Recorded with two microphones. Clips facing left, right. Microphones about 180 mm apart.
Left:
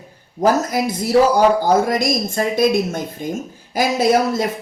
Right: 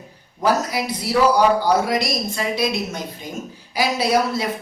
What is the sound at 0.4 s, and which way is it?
A woman's voice, 45° left (ahead or behind).